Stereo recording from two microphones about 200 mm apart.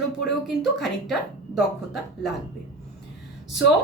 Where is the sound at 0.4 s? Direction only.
Centre (ahead or behind).